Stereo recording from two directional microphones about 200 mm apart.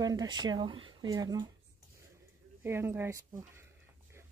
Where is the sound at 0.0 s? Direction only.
20° right (ahead or behind).